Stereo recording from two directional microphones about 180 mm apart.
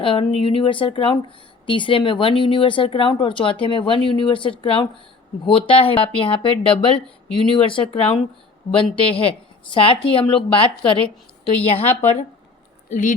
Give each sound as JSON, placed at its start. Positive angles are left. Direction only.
{"t": 0.0, "sound": "speech", "side_deg": 30}
{"t": 12.9, "sound": "speech", "side_deg": 45}